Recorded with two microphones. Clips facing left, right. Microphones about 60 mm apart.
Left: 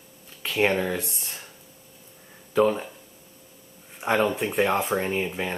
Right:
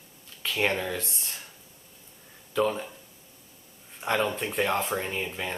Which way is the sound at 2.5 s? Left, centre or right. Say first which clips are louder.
Left 5 dB; centre.